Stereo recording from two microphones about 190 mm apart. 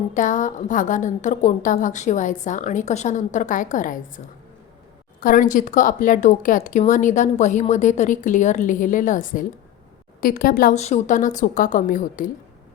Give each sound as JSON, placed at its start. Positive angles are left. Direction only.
{"t": 0.1, "sound": "a woman's voice", "side_deg": 40}
{"t": 5.2, "sound": "a woman's voice", "side_deg": 45}